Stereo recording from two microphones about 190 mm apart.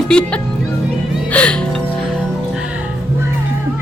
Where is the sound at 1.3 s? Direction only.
5° left (ahead or behind).